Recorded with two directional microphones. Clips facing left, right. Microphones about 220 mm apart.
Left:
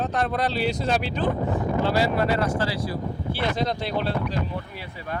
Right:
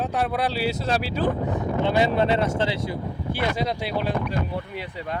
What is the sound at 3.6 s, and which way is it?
Speech, 10° right (ahead or behind).